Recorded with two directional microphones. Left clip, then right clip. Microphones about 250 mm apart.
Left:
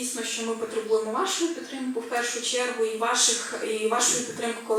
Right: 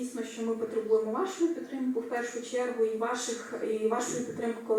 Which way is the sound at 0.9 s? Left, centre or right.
Centre.